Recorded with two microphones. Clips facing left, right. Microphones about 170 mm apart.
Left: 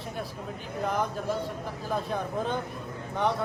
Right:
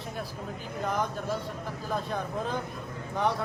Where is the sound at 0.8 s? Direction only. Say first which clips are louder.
Left 2 dB; centre (ahead or behind).